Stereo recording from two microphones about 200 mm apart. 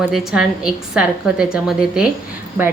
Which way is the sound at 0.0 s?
5° right (ahead or behind).